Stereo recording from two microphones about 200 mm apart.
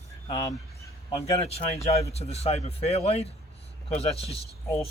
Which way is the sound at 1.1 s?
30° left (ahead or behind).